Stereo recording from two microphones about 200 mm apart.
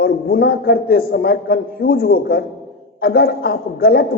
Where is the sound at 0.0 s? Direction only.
50° left (ahead or behind).